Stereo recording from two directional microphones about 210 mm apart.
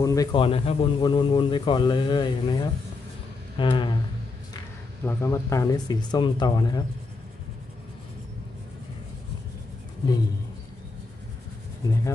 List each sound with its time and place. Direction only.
0.0 s speech: 15° left (ahead or behind)
5.0 s speech: 15° left (ahead or behind)
11.8 s speech: 15° left (ahead or behind)